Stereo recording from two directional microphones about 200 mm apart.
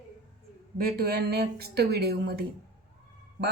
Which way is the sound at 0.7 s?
50° right (ahead or behind).